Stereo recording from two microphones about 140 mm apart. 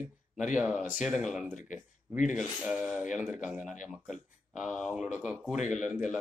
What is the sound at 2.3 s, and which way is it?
Speech, centre (ahead or behind).